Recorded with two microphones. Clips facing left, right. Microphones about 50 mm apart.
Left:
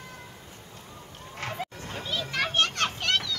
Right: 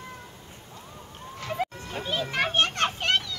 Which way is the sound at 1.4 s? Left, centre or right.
Left.